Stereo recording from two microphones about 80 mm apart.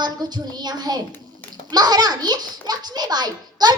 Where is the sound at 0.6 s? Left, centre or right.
Right.